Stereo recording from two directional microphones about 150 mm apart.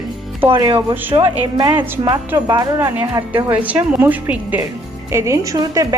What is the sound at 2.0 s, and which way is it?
A woman's voice, 25° right (ahead or behind).